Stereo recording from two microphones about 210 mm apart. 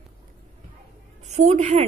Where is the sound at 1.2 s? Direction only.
30° right (ahead or behind).